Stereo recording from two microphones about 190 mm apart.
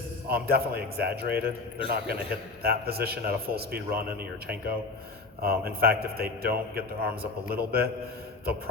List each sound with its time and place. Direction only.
0.3 s a man's voice: 55° right (ahead or behind)